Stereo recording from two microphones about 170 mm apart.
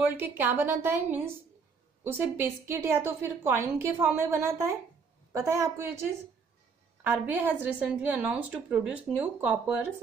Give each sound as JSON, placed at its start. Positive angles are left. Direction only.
{"t": 0.0, "sound": "a woman's voice", "side_deg": -10}
{"t": 2.3, "sound": "a woman's voice", "side_deg": -15}